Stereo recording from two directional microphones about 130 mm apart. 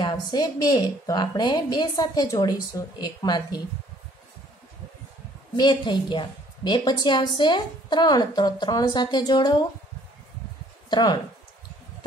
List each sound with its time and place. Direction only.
0.0 s a woman's voice: 35° left (ahead or behind)
5.6 s a woman's voice: 35° left (ahead or behind)
10.9 s speech: 30° left (ahead or behind)